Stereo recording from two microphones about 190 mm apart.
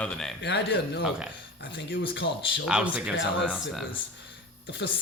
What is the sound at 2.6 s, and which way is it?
Speech, 5° right (ahead or behind).